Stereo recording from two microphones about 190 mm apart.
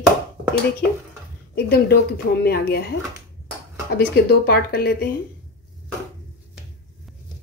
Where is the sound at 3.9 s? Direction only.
55° left (ahead or behind).